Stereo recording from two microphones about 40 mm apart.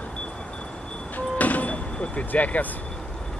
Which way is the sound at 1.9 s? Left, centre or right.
Left.